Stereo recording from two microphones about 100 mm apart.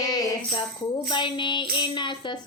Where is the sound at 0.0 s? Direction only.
40° left (ahead or behind).